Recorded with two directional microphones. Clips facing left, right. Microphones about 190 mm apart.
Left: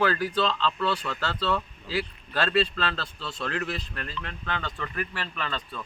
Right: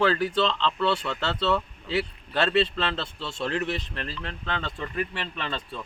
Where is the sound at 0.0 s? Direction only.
25° right (ahead or behind).